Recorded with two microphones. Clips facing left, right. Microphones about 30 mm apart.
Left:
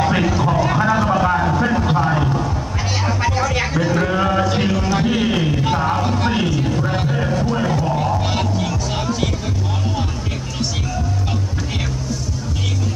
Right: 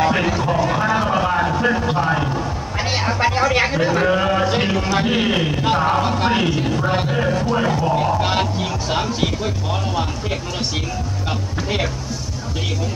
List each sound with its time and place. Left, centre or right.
0.2 s speech: centre
1.2 s vehicle: centre
1.9 s speech: centre
3.2 s speech: right